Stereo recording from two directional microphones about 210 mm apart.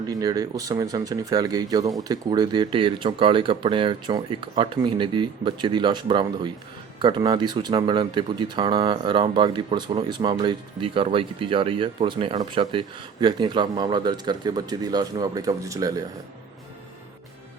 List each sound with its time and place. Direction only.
0.1 s speech: 20° right (ahead or behind)